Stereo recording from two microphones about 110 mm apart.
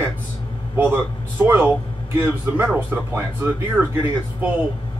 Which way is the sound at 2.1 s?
15° right (ahead or behind).